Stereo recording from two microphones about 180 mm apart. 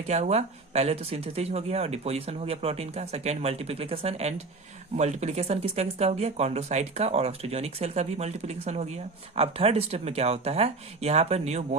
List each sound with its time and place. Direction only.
0.1 s speech: 40° right (ahead or behind)